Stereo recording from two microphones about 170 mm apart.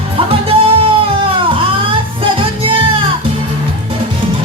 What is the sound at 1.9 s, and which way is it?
Music, 30° right (ahead or behind).